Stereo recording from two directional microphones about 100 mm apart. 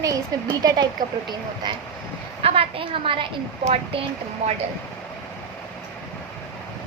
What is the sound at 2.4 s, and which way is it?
Speech, 75° right (ahead or behind).